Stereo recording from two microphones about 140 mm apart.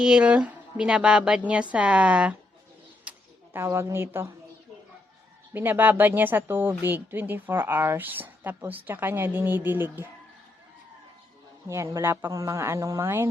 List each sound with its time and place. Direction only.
0.0 s speech: 5° right (ahead or behind)
3.0 s a sound: 10° right (ahead or behind)
5.5 s speech: 15° right (ahead or behind)
11.7 s a woman's voice: 20° right (ahead or behind)